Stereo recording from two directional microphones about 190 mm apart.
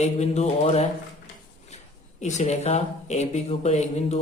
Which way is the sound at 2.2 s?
35° left (ahead or behind).